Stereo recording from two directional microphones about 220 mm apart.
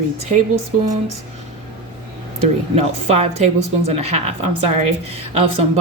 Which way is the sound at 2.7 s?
30° right (ahead or behind).